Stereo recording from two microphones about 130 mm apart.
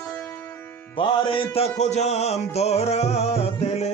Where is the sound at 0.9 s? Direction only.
40° left (ahead or behind).